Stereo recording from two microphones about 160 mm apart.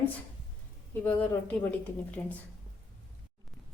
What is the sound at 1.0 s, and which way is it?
Speech, 10° left (ahead or behind).